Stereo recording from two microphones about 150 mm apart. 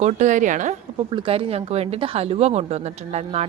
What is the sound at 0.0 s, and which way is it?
Speech, 50° right (ahead or behind).